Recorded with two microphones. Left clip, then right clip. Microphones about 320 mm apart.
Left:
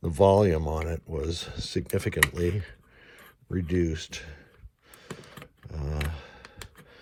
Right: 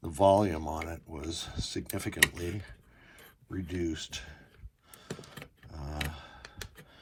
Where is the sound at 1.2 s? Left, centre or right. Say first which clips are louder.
Left 4 dB; left.